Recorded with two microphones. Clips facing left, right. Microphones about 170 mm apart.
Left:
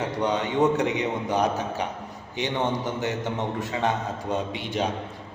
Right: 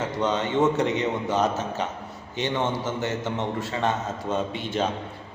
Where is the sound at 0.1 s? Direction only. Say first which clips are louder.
Right 1 dB; 15° left (ahead or behind).